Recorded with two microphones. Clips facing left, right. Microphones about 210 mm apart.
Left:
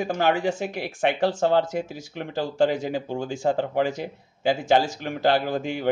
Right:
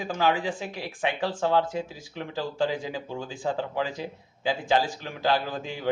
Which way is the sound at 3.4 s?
50° left (ahead or behind).